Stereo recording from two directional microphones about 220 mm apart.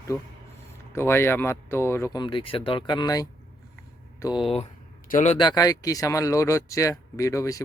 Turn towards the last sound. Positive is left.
turn(degrees=15)  # may be behind; listen again after turning